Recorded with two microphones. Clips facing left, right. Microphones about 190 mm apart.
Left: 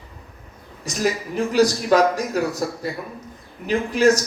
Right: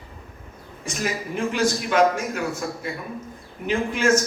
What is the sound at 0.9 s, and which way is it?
Speech, 35° left (ahead or behind).